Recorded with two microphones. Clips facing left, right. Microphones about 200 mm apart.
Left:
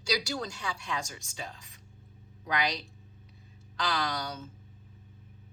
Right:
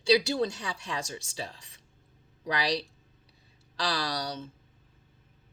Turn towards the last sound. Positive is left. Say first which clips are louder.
# right 1 dB
turn(degrees=-35)  # may be behind; listen again after turning